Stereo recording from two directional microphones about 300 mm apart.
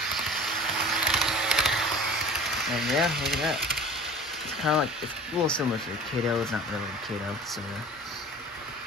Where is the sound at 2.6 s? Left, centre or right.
Centre.